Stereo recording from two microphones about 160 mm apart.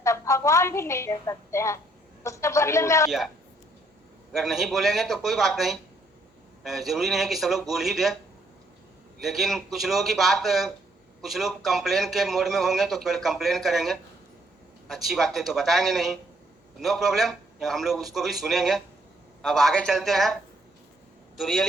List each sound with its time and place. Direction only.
0.0 s a woman's voice: 20° left (ahead or behind)
4.3 s a man's voice: centre (ahead or behind)
9.2 s a man's voice: centre (ahead or behind)
21.3 s a man's voice: centre (ahead or behind)